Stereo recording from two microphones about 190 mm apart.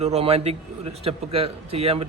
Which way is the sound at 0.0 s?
35° right (ahead or behind).